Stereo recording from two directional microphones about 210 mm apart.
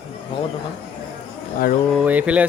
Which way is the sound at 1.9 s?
5° right (ahead or behind).